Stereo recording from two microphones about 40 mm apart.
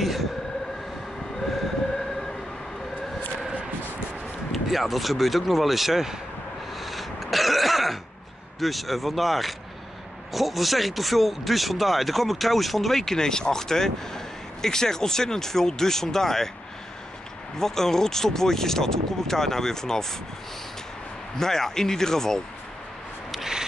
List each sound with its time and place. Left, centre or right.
0.0 s train: centre
4.5 s speech: centre
6.8 s throat clearing: centre
8.5 s speech: centre
17.6 s speech: centre
21.4 s speech: centre